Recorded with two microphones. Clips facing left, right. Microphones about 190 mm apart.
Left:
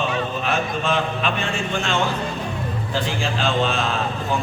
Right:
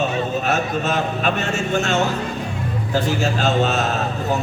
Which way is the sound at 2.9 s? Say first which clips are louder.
Right 5 dB; 45° right (ahead or behind).